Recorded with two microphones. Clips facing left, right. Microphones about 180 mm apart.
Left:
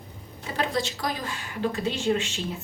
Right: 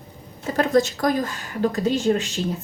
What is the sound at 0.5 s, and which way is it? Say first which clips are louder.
Speech: right 9 dB; 45° right (ahead or behind).